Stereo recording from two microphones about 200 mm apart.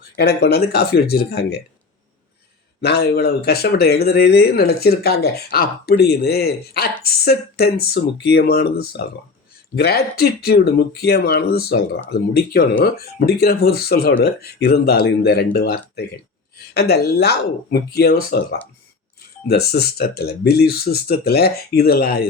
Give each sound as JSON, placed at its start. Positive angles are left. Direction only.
{"t": 0.2, "sound": "speech", "side_deg": 55}
{"t": 2.8, "sound": "speech", "side_deg": 50}